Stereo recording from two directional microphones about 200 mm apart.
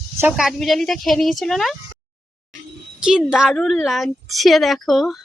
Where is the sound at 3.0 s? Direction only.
5° right (ahead or behind).